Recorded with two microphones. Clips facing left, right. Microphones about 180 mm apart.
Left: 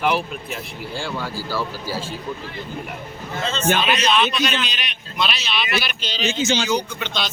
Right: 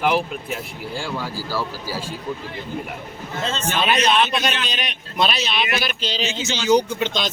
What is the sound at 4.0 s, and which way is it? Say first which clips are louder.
A man's voice: right 1 dB; 50° right (ahead or behind).